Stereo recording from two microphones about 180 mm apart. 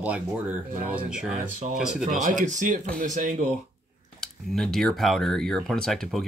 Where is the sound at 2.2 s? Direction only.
45° right (ahead or behind).